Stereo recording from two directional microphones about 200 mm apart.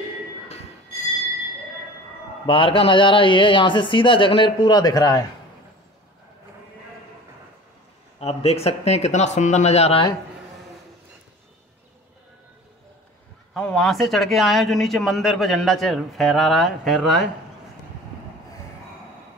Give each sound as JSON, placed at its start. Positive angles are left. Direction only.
{"t": 2.4, "sound": "speech", "side_deg": 25}
{"t": 8.2, "sound": "speech", "side_deg": 30}
{"t": 13.5, "sound": "speech", "side_deg": 0}